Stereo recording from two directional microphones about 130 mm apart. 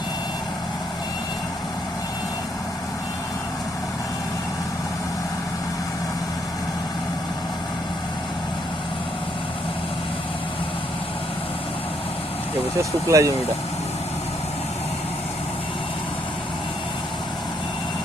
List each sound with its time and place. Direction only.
13.1 s speech: 25° right (ahead or behind)